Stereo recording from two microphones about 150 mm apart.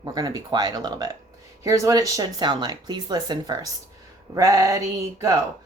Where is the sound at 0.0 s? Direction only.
30° right (ahead or behind).